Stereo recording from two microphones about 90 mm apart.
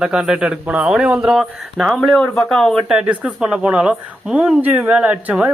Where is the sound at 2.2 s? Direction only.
5° left (ahead or behind).